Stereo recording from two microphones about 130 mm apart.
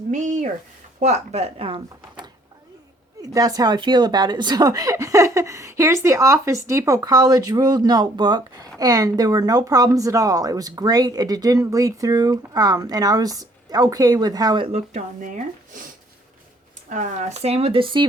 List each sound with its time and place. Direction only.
0.1 s speech: 70° right (ahead or behind); by 2.3 s 40° right (ahead or behind)
3.2 s speech: 30° right (ahead or behind)
14.7 s speech: 60° right (ahead or behind)
16.9 s speech: 65° right (ahead or behind); by 18.1 s 40° right (ahead or behind)